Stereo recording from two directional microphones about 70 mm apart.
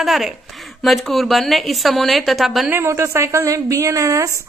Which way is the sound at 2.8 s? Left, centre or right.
Right.